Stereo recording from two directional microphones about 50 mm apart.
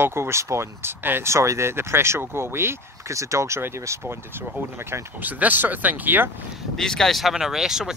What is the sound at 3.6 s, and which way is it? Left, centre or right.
Speech, right.